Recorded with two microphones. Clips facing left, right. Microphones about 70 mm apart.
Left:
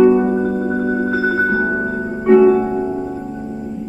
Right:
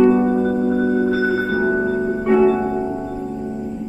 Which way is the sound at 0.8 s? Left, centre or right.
Centre.